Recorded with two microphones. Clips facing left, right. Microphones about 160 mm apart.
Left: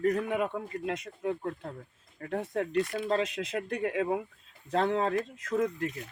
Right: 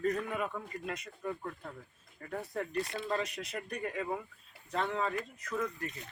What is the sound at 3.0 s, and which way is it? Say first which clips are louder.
Speech: left 6 dB; 75° left (ahead or behind).